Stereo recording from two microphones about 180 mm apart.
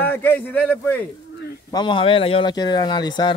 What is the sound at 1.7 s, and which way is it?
Speech, 25° left (ahead or behind).